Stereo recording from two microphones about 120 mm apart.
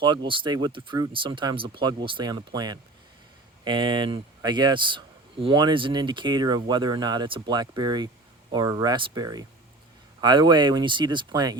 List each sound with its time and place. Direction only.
0.0 s speech: 40° right (ahead or behind)